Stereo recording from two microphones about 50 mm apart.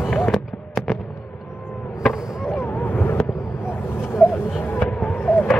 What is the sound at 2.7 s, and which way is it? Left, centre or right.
Boat, left.